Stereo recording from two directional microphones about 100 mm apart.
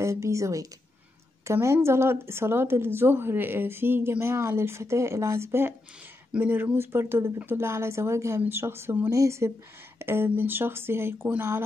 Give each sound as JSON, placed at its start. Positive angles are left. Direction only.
{"t": 0.0, "sound": "a woman's voice", "side_deg": -30}